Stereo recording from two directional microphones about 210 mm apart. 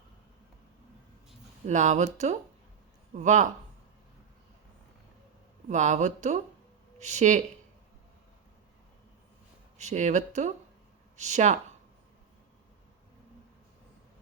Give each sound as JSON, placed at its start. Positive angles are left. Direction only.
{"t": 1.6, "sound": "speech", "side_deg": -35}
{"t": 5.6, "sound": "speech", "side_deg": -35}
{"t": 9.7, "sound": "speech", "side_deg": -35}